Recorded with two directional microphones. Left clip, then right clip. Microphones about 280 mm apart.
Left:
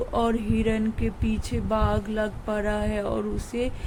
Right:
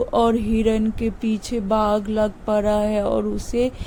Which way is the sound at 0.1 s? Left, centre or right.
Centre.